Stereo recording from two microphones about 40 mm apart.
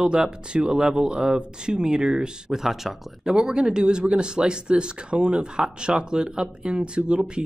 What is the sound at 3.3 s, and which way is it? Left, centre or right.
Speech, right.